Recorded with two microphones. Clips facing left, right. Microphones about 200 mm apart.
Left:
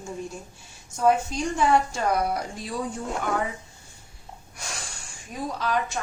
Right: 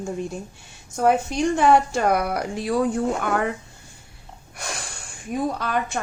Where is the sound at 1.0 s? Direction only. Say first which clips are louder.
Right 3 dB; 65° right (ahead or behind).